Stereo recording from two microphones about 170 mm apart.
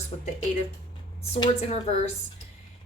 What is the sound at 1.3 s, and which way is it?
Speech, 35° left (ahead or behind).